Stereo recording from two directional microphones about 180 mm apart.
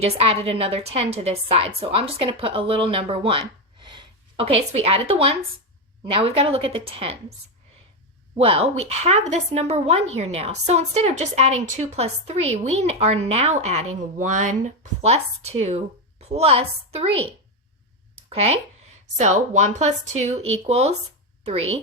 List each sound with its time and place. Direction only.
0.0 s a woman's voice: 30° right (ahead or behind)
8.4 s a woman's voice: 30° right (ahead or behind)
18.2 s a sound: 35° right (ahead or behind)
19.1 s a woman's voice: 40° right (ahead or behind)